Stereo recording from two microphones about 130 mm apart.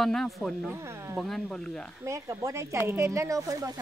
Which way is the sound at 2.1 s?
20° right (ahead or behind).